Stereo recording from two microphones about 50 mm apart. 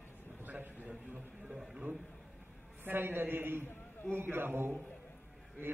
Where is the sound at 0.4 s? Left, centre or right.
Right.